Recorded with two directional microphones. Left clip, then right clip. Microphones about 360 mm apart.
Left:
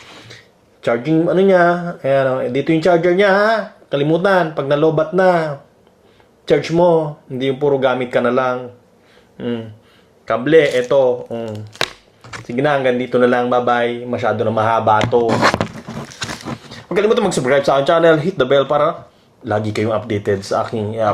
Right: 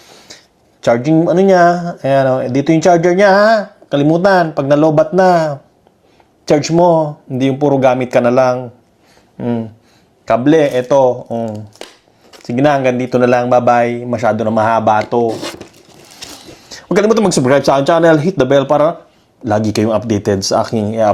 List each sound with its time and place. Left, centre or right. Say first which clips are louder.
0.9 s speech: right 4 dB; right
6.7 s speech: right 3 dB; right
7.4 s speech: right 4 dB; right
10.2 s speech: right 2 dB; right
16.9 s speech: right 3 dB; right